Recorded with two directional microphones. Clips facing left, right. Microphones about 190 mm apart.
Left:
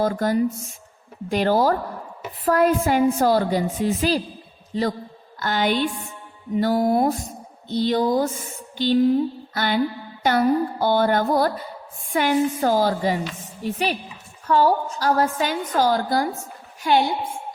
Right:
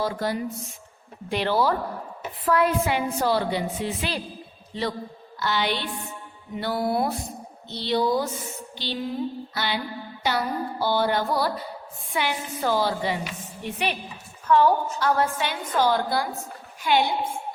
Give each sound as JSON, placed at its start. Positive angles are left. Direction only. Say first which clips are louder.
{"t": 0.0, "sound": "a woman's voice", "louder": "left 6 dB", "side_deg": 45}